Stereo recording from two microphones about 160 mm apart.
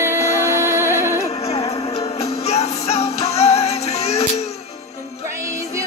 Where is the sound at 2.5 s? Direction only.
40° left (ahead or behind).